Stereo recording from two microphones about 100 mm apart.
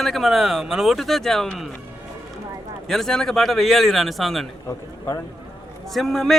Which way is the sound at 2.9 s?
5° left (ahead or behind).